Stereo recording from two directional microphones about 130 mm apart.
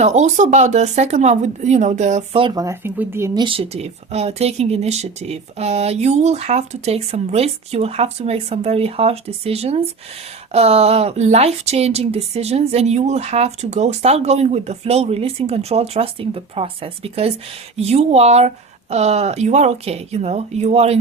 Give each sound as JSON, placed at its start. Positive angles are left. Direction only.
{"t": 0.0, "sound": "speech", "side_deg": -65}
{"t": 2.6, "sound": "speech", "side_deg": -20}
{"t": 3.3, "sound": "speech", "side_deg": -40}